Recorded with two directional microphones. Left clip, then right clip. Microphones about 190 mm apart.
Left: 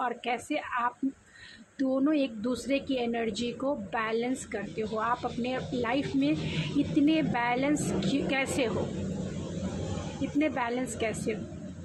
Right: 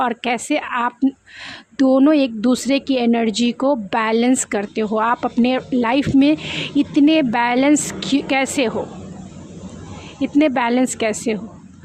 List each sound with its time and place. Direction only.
0.0 s a woman's voice: 50° right (ahead or behind)
10.3 s a woman's voice: 50° right (ahead or behind)